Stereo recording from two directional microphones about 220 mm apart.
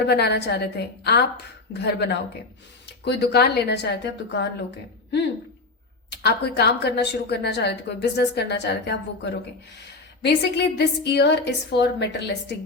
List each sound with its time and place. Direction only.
0.0 s a woman's voice: 50° left (ahead or behind)
6.1 s a woman's voice: 50° left (ahead or behind)